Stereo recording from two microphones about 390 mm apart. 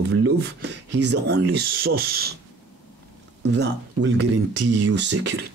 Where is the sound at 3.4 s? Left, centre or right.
Right.